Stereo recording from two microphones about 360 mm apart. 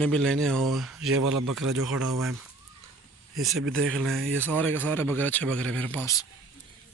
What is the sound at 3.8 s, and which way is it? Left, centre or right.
Speech, centre.